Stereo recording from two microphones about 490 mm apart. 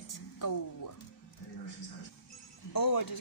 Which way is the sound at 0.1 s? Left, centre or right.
Left.